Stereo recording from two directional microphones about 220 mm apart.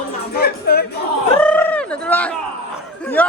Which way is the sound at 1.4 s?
5° left (ahead or behind).